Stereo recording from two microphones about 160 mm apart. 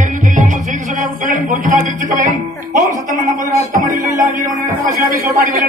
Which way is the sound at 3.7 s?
55° right (ahead or behind).